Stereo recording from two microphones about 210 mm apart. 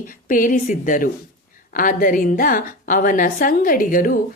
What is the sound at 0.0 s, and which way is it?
A woman's voice, 40° left (ahead or behind).